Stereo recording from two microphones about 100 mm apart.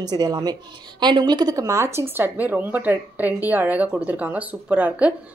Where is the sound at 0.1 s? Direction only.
40° right (ahead or behind).